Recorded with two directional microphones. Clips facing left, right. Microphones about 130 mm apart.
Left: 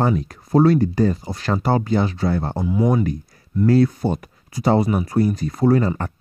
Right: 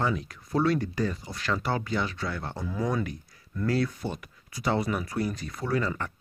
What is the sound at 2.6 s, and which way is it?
Speech, 20° left (ahead or behind).